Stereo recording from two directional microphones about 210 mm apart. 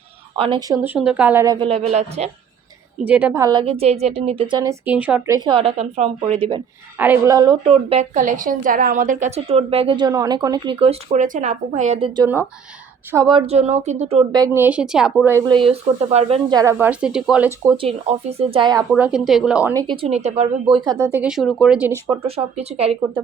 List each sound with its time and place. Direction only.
0.3 s a woman's voice: 25° right (ahead or behind)
0.8 s a woman's voice: 5° right (ahead or behind)
1.6 s a woman's voice: 30° right (ahead or behind)
3.0 s a woman's voice: 10° right (ahead or behind); by 6.6 s 25° right (ahead or behind)
7.0 s a woman's voice: 10° right (ahead or behind)
7.7 s a woman's voice: 30° right (ahead or behind)
14.3 s a woman's voice: 15° right (ahead or behind); by 16.6 s 30° right (ahead or behind)
16.6 s a woman's voice: 10° right (ahead or behind)
17.7 s a woman's voice: 25° right (ahead or behind)
18.9 s speech: 5° right (ahead or behind)
19.7 s a woman's voice: 25° right (ahead or behind)
21.1 s speech: 5° right (ahead or behind)
22.1 s a woman's voice: 30° right (ahead or behind)